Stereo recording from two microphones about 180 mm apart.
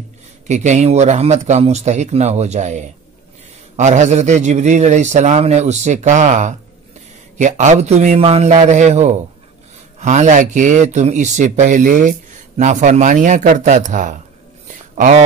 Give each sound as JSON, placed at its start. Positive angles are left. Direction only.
{"t": 0.5, "sound": "a man's voice", "side_deg": -40}